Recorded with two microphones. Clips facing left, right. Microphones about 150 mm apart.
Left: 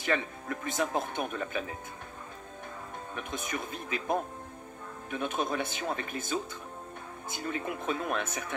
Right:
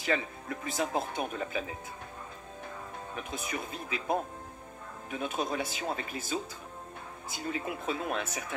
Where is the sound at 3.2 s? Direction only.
50° left (ahead or behind).